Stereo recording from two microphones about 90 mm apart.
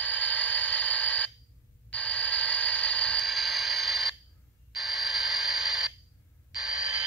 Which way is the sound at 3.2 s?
Centre (ahead or behind).